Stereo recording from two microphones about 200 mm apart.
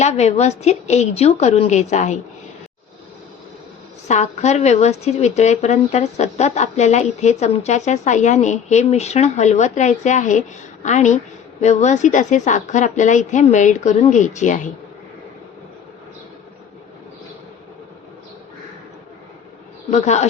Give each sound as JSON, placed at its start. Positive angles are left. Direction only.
{"t": 0.0, "sound": "speech", "side_deg": 35}
{"t": 4.1, "sound": "speech", "side_deg": 35}
{"t": 19.9, "sound": "speech", "side_deg": 35}